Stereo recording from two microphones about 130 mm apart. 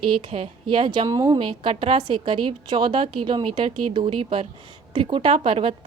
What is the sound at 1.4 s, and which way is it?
A woman's voice, 40° right (ahead or behind).